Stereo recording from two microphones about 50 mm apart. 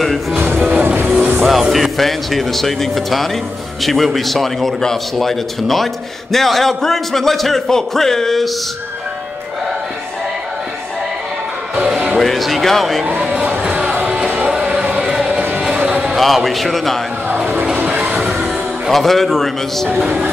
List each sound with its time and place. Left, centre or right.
0.8 s music: right
1.4 s a man's voice: centre
11.7 s music: centre
12.2 s speech: centre
13.2 s music: centre
15.0 s a sound: centre
15.6 s music: centre
16.2 s a man's voice: centre
17.7 s train: right
18.3 s music: right
18.9 s a man's voice: centre